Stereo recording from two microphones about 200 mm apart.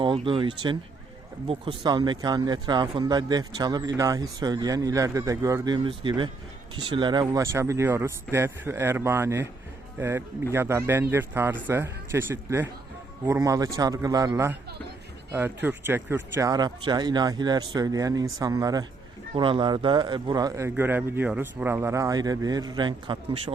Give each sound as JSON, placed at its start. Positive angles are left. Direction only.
{"t": 0.0, "sound": "speech", "side_deg": -25}